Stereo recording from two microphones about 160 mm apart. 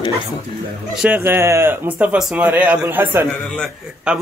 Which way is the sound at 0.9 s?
10° right (ahead or behind).